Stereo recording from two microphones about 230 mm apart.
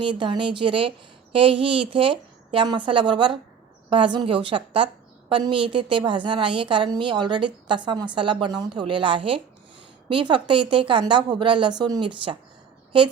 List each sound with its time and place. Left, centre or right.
0.0 s a woman's voice: right